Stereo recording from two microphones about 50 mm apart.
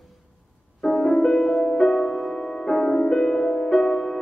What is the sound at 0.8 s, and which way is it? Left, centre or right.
Music, centre.